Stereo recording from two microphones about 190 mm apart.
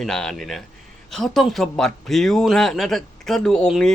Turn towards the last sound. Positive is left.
turn(degrees=5)  # may be behind; listen again after turning